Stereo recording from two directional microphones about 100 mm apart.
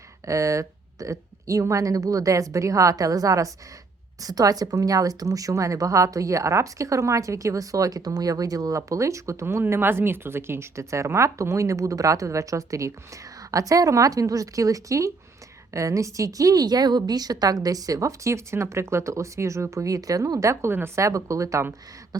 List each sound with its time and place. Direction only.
0.3 s a woman's voice: 30° right (ahead or behind)